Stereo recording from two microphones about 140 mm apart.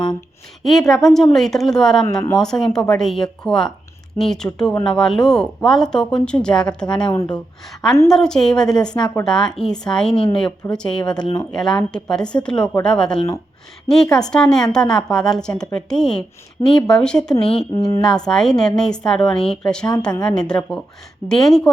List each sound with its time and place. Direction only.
0.6 s a woman's voice: centre (ahead or behind)
17.7 s a woman's voice: 40° left (ahead or behind)
18.0 s a woman's voice: 5° left (ahead or behind)